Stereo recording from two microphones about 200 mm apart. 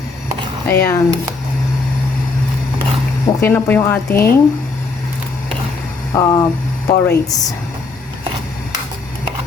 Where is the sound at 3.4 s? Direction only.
10° left (ahead or behind).